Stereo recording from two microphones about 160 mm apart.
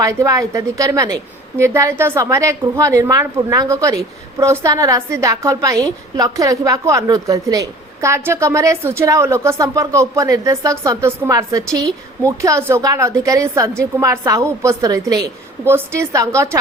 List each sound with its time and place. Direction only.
0.0 s a woman's voice: 20° right (ahead or behind)